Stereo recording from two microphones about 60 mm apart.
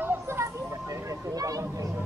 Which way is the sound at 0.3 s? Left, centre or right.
Right.